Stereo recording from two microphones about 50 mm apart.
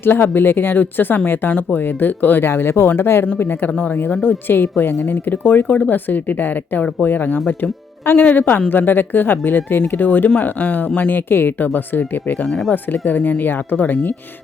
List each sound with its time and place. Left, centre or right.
0.0 s speech: left
2.4 s speech: left
3.8 s speech: left
11.3 s speech: left
12.5 s speech: centre
12.7 s speech: left